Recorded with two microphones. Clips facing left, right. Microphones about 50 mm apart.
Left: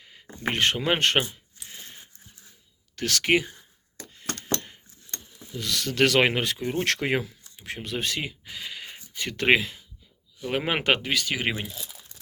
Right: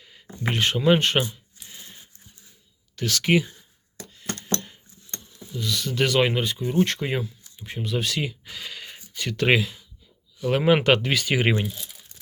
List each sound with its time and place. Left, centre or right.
0.0 s a sound: left
0.4 s speech: left
1.8 s dog: left
2.9 s speech: left
4.1 s a sound: left
5.5 s speech: left
7.5 s a sound: left
7.8 s speech: left
8.2 s a sound: centre
9.1 s speech: left
10.4 s speech: centre
11.0 s speech: centre